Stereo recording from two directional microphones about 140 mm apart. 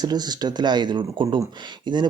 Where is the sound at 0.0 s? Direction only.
30° right (ahead or behind).